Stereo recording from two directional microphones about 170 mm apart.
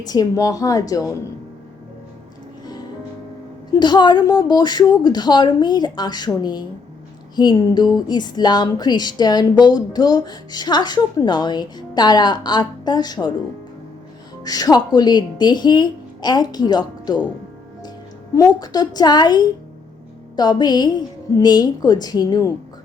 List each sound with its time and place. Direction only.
0.0 s speech: 20° left (ahead or behind)
3.8 s speech: 25° left (ahead or behind)
14.4 s speech: 20° left (ahead or behind)
18.3 s speech: 20° left (ahead or behind)